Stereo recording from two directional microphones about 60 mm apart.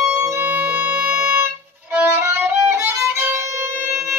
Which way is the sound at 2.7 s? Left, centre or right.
Right.